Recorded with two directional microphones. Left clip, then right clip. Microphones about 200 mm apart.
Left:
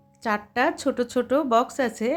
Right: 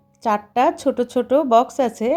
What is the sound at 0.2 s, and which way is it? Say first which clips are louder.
A woman's voice: right 6 dB; 5° right (ahead or behind).